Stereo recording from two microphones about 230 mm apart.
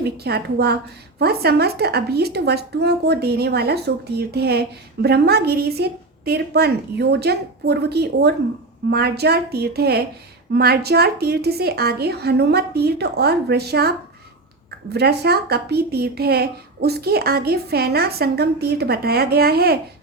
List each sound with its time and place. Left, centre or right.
0.0 s a woman's voice: right
14.9 s a woman's voice: right